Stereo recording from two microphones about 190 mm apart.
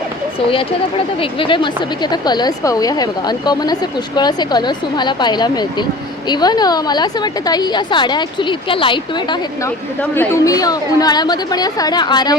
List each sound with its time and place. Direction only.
1.2 s a woman's voice: 25° left (ahead or behind)
10.0 s a woman's voice: 15° left (ahead or behind)